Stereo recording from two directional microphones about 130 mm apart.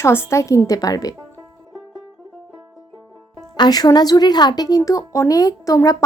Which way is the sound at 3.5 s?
30° left (ahead or behind).